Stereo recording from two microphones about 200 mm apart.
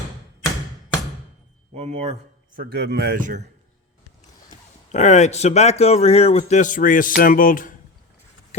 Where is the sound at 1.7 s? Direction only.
30° right (ahead or behind).